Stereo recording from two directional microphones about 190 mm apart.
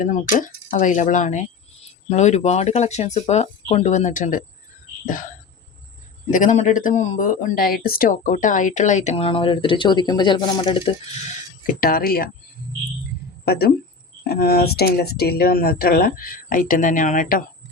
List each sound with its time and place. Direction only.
0.0 s speech: 45° left (ahead or behind)
6.3 s speech: 40° left (ahead or behind)
11.6 s speech: 50° left (ahead or behind)
13.4 s speech: 55° left (ahead or behind)